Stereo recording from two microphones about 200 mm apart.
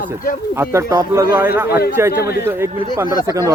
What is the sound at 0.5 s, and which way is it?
Speech, 15° right (ahead or behind).